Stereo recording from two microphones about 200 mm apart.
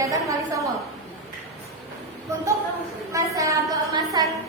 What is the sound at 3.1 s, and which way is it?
A woman's voice, 15° right (ahead or behind).